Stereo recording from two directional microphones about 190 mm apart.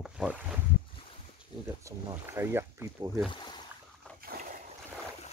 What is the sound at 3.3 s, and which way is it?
Boat, 25° left (ahead or behind).